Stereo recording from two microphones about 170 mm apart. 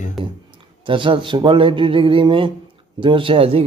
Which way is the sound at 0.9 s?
30° right (ahead or behind).